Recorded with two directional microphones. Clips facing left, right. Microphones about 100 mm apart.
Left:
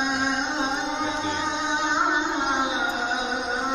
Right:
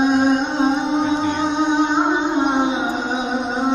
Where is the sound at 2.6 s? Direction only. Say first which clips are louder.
Right 6 dB; 35° right (ahead or behind).